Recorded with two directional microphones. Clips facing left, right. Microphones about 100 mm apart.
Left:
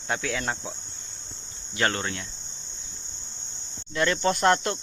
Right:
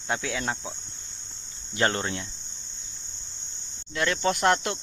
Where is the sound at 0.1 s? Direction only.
15° right (ahead or behind).